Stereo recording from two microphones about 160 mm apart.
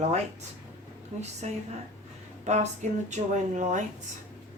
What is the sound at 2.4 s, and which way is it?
A woman's voice, 45° right (ahead or behind).